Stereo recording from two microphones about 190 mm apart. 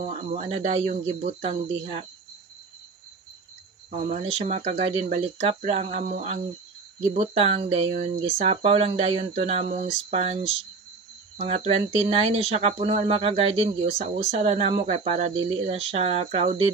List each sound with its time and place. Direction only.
0.3 s speech: 35° right (ahead or behind)
4.1 s speech: 35° right (ahead or behind)